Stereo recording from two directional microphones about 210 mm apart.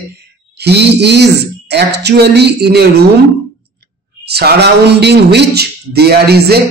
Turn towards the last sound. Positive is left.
turn(degrees=-50)  # may be behind; listen again after turning